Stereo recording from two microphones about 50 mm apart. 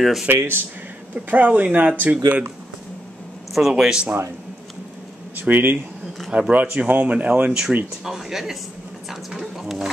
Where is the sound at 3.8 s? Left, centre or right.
Centre.